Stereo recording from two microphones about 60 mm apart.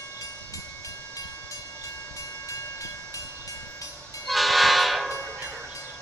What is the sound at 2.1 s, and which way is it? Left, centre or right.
Train, left.